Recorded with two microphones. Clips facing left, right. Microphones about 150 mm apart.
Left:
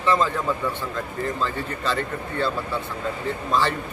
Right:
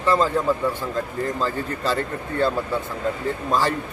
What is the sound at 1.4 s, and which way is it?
A man's voice, 40° right (ahead or behind).